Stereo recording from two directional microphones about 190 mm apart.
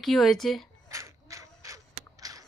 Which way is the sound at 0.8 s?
15° right (ahead or behind).